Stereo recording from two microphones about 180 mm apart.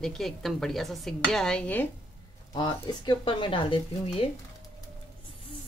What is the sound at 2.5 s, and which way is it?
Speech, 25° left (ahead or behind).